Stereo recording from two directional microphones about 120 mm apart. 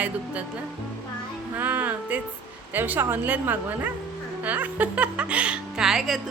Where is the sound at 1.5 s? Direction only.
15° right (ahead or behind).